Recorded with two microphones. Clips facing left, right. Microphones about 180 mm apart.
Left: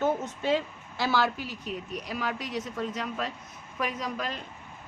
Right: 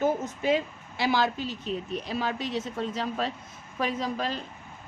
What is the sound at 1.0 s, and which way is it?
A woman's voice, 20° right (ahead or behind).